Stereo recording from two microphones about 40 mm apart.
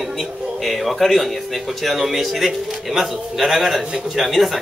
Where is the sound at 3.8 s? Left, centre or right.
Centre.